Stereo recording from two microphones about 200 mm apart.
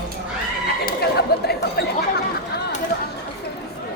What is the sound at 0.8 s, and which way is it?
Speech, 55° left (ahead or behind).